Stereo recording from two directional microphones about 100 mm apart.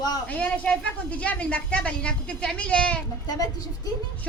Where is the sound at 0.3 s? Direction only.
15° left (ahead or behind).